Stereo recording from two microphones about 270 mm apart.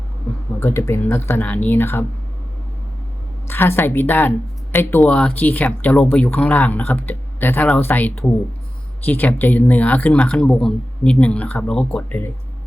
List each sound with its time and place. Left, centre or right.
0.6 s speech: centre
3.4 s speech: centre